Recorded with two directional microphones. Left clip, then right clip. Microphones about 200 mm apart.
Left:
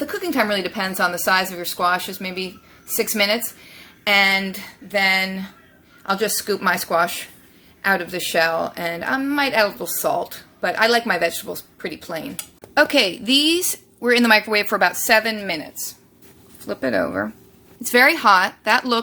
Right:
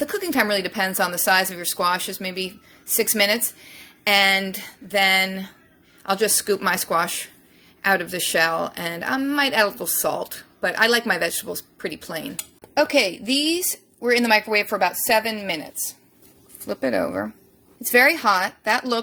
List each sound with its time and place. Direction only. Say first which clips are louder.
0.0 s a woman's voice: left 1 dB; 35° right (ahead or behind)
12.7 s a woman's voice: left 3 dB; 5° right (ahead or behind)